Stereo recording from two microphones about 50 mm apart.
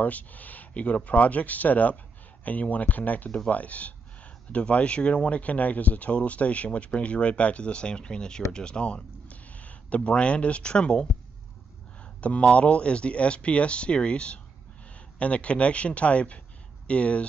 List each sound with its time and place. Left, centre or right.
0.0 s speech: left
12.0 s a sound: left
12.5 s speech: left